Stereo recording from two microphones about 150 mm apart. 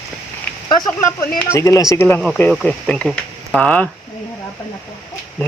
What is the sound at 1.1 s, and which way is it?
Speech, 15° left (ahead or behind).